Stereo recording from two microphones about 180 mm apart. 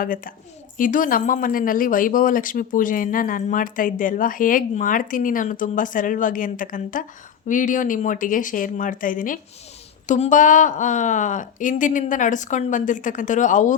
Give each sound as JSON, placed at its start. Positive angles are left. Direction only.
{"t": 0.0, "sound": "speech", "side_deg": 50}